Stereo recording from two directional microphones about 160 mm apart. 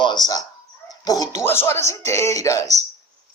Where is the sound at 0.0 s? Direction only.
25° left (ahead or behind).